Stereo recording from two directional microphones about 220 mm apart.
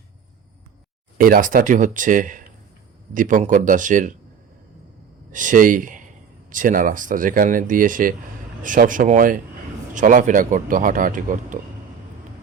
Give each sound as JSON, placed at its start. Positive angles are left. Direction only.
{"t": 1.2, "sound": "speech", "side_deg": -40}
{"t": 5.3, "sound": "speech", "side_deg": -35}